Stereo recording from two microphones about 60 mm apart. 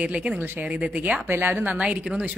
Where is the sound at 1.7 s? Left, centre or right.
Centre.